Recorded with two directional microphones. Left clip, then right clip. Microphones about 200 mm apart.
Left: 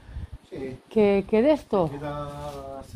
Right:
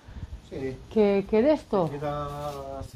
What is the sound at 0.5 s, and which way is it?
Speech, 25° right (ahead or behind).